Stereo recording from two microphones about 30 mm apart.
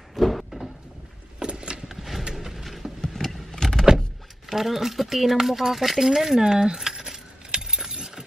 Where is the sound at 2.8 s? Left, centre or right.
Right.